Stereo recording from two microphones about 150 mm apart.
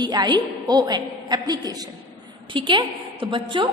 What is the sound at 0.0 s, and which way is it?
A woman's voice, 30° right (ahead or behind).